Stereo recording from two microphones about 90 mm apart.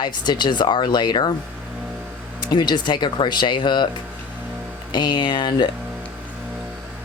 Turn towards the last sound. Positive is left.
turn(degrees=55)  # may be behind; listen again after turning